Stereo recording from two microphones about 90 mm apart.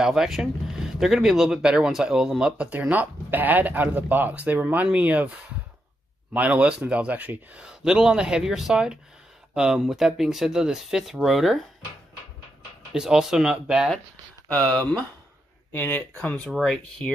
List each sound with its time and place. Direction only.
0.0 s speech: 5° right (ahead or behind)
12.9 s speech: 5° right (ahead or behind)
14.7 s speech: 15° left (ahead or behind)
15.7 s speech: 25° left (ahead or behind)
16.2 s speech: 15° left (ahead or behind)